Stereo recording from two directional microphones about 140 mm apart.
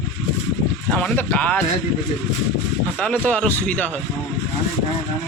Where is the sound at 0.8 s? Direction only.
10° left (ahead or behind).